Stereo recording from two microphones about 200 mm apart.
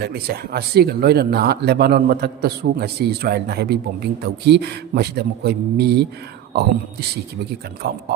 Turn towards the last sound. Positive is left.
turn(degrees=-55)  # may be behind; listen again after turning